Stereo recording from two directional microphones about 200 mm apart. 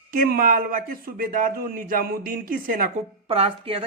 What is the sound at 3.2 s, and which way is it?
Speech, 30° right (ahead or behind).